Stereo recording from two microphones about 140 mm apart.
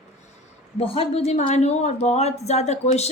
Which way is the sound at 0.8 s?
45° left (ahead or behind).